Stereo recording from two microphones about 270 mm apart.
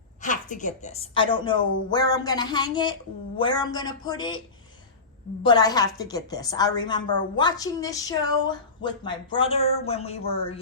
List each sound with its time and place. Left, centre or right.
0.2 s a woman's voice: left
5.4 s a woman's voice: centre